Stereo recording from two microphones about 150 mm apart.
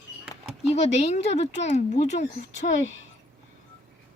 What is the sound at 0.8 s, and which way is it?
Speech, 45° left (ahead or behind).